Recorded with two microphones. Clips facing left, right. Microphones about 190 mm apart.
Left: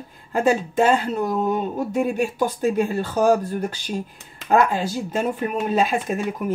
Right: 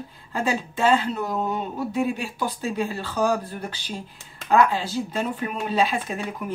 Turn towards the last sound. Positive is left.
turn(degrees=50)  # may be behind; listen again after turning